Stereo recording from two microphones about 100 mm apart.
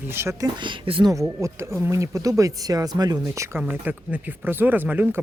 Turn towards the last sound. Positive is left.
turn(degrees=-20)  # may be behind; listen again after turning